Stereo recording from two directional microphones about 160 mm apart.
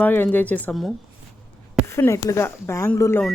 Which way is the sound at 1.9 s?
15° left (ahead or behind).